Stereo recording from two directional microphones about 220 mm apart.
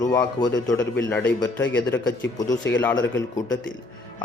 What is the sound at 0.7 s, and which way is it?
A man's voice, 5° left (ahead or behind).